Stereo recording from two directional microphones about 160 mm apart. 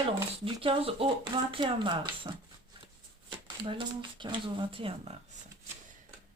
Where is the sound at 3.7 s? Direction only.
30° right (ahead or behind).